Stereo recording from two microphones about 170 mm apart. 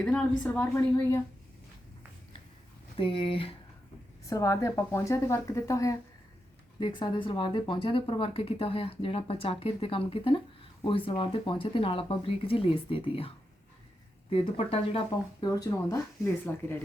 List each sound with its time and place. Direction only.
0.0 s speech: 5° left (ahead or behind)
3.0 s speech: 30° left (ahead or behind)
4.3 s speech: 20° left (ahead or behind)
15.4 s speech: 20° left (ahead or behind)